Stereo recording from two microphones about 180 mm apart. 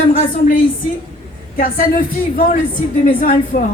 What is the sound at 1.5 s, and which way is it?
A man's voice, 50° left (ahead or behind).